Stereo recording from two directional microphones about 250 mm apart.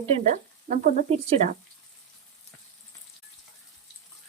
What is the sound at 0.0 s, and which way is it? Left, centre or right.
Frying, right.